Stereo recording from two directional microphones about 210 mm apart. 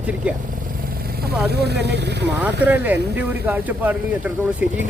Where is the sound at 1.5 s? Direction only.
50° right (ahead or behind).